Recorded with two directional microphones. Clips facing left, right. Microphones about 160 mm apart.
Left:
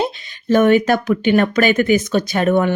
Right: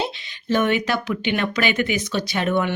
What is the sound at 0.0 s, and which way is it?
Speech, 45° left (ahead or behind).